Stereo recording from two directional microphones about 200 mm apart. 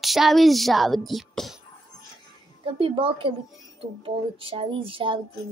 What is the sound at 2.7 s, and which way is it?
Speech, 25° right (ahead or behind).